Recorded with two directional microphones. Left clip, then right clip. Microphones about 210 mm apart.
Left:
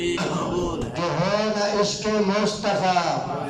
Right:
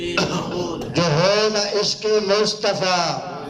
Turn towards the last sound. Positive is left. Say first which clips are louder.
# right 2 dB
turn(degrees=-50)  # may be behind; listen again after turning